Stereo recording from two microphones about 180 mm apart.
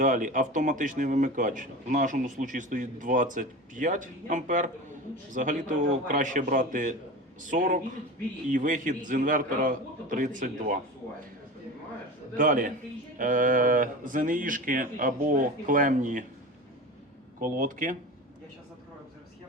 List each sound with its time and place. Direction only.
0.0 s speech: 45° right (ahead or behind)
12.4 s speech: 50° right (ahead or behind)
17.4 s speech: 45° right (ahead or behind)